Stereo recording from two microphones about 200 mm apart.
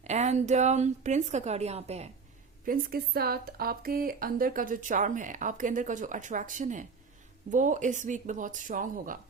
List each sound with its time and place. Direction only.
0.0 s speech: 35° right (ahead or behind)
2.6 s speech: 50° right (ahead or behind)